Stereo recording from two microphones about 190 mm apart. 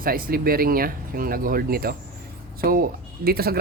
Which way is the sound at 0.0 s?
50° right (ahead or behind).